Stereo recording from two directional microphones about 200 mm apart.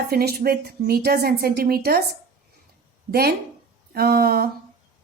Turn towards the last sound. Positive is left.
turn(degrees=-50)  # may be behind; listen again after turning